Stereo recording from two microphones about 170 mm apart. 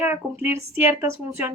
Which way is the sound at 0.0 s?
15° right (ahead or behind).